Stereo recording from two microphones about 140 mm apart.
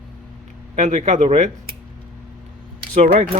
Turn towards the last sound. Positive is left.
turn(degrees=-65)  # may be behind; listen again after turning